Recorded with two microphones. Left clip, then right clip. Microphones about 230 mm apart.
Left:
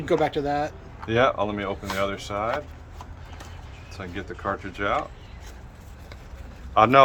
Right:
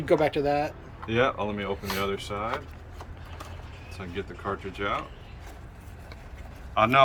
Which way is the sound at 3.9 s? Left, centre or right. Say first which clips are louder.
Left 1 dB; centre.